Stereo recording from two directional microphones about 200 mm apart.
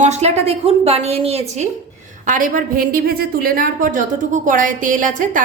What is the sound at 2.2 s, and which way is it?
A woman's voice, 40° right (ahead or behind).